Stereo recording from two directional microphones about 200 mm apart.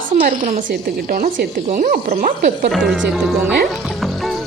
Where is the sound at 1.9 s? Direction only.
50° right (ahead or behind).